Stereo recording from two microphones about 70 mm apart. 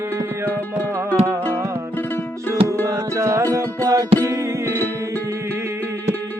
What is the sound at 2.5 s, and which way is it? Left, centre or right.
Music, right.